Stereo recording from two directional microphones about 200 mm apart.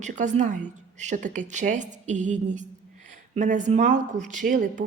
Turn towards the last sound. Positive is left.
turn(degrees=-40)  # may be behind; listen again after turning